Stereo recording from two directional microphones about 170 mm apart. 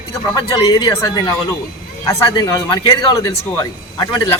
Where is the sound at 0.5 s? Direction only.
20° left (ahead or behind).